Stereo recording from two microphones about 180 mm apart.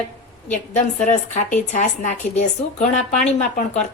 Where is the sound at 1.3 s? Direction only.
40° left (ahead or behind).